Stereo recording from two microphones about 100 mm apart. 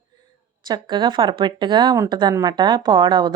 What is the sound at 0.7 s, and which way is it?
Speech, 50° right (ahead or behind).